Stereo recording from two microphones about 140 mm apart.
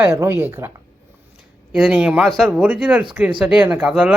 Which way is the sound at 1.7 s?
5° right (ahead or behind).